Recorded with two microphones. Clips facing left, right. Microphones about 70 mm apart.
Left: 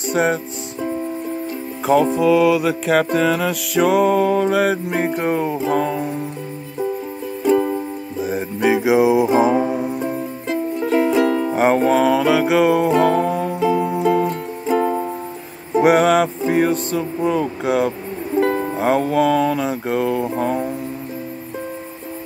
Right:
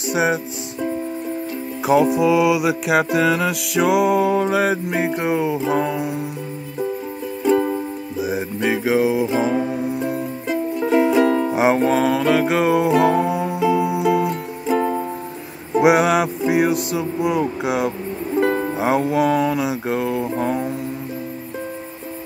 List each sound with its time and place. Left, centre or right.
0.1 s music: centre
1.9 s music: centre
7.4 s music: centre
9.7 s music: centre